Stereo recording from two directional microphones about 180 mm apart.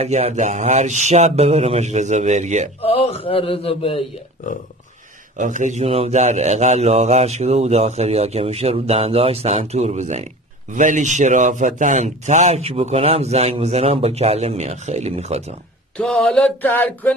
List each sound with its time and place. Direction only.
0.0 s a man's voice: 35° right (ahead or behind)
2.8 s mantra: 35° left (ahead or behind)
5.4 s a man's voice: 45° right (ahead or behind)
16.0 s mantra: 5° left (ahead or behind)